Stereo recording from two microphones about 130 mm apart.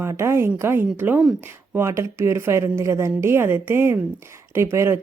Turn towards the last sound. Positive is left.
turn(degrees=-20)  # may be behind; listen again after turning